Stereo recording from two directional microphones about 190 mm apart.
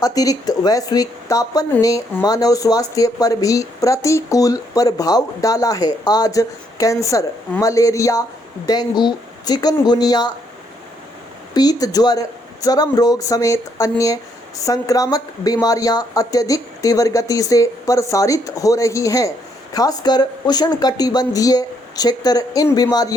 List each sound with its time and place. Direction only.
0.0 s speech: 20° left (ahead or behind)
11.5 s speech: 20° left (ahead or behind)